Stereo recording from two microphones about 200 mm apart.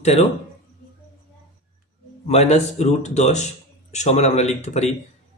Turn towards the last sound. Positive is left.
turn(degrees=35)  # may be behind; listen again after turning